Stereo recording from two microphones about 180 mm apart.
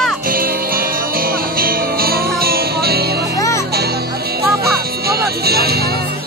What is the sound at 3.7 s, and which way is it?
Music, 60° right (ahead or behind).